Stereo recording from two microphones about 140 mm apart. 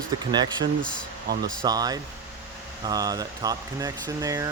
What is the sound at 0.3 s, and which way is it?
Speech, 30° right (ahead or behind).